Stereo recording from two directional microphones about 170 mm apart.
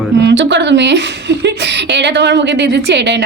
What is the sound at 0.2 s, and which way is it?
A woman's voice, 90° right.